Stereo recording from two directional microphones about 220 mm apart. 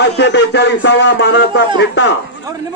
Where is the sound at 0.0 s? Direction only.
50° left (ahead or behind).